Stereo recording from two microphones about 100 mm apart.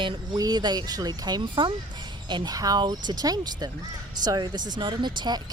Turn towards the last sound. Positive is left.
turn(degrees=-45)  # may be behind; listen again after turning